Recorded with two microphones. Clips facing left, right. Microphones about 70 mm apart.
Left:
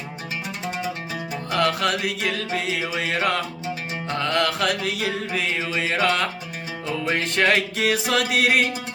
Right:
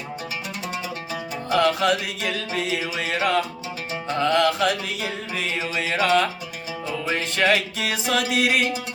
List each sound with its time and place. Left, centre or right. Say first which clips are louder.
1.5 s mantra: right 2 dB; left